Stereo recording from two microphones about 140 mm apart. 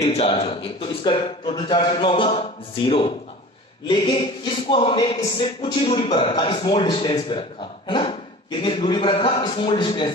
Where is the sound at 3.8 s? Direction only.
35° left (ahead or behind).